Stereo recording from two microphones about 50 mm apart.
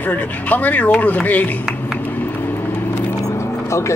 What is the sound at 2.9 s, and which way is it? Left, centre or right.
Vehicle, left.